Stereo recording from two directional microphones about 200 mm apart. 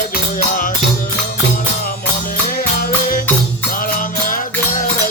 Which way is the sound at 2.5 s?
45° left (ahead or behind).